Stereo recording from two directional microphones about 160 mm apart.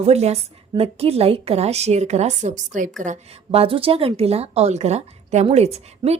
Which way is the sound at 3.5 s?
35° right (ahead or behind).